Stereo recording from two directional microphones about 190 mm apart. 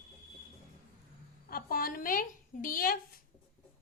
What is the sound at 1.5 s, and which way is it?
A woman's voice, 50° left (ahead or behind).